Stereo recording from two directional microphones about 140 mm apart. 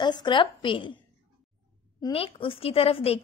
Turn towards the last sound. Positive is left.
turn(degrees=45)  # may be behind; listen again after turning